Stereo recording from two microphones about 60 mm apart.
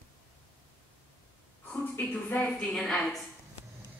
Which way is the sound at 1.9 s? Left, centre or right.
Left.